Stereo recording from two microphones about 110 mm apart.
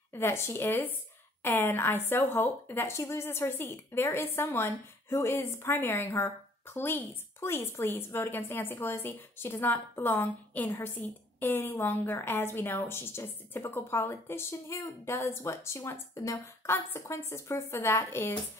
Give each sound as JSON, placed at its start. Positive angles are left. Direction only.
{"t": 0.1, "sound": "a woman's voice", "side_deg": 20}